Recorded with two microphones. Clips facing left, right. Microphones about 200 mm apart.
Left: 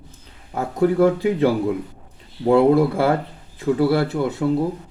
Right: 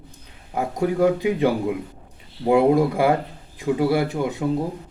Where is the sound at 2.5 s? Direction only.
15° right (ahead or behind).